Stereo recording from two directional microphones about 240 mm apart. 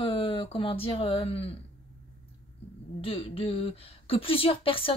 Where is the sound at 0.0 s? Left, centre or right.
Left.